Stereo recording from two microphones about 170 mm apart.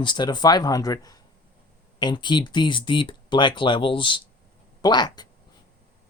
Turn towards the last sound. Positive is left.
turn(degrees=25)  # may be behind; listen again after turning